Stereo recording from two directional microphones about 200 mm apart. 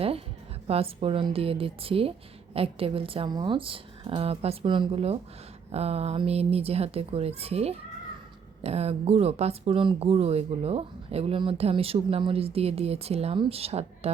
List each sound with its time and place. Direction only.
0.7 s a woman's voice: 30° right (ahead or behind)